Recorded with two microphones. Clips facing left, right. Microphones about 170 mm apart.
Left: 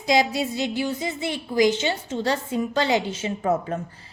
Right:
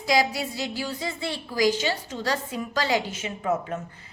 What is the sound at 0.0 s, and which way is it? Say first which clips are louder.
A woman's voice: left 3 dB; 20° left (ahead or behind).